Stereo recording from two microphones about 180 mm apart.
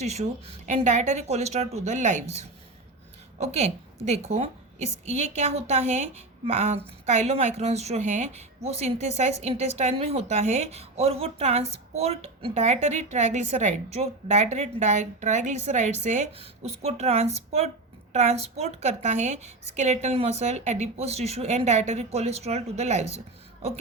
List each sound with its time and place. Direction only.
0.0 s a woman's voice: 40° right (ahead or behind)
3.4 s a woman's voice: 35° right (ahead or behind)